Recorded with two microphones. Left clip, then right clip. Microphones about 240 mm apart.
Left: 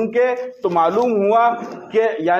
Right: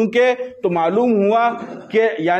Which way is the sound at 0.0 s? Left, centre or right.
Right.